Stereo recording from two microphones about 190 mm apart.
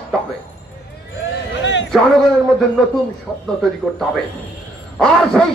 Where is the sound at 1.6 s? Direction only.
70° left (ahead or behind).